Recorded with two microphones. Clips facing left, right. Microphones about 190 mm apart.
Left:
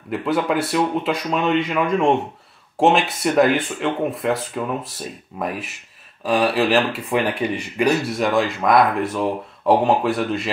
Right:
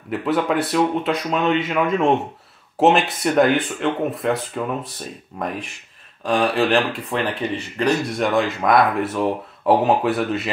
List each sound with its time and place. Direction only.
0.1 s speech: centre (ahead or behind)